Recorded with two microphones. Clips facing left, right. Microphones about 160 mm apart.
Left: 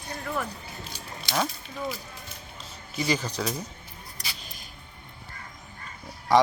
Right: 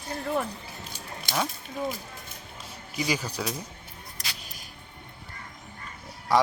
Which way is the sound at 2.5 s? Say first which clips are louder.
Even; 10° right (ahead or behind).